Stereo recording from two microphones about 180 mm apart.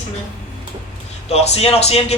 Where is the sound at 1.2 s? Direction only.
35° left (ahead or behind).